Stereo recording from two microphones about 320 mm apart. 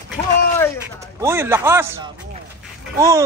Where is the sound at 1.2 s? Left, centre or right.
Centre.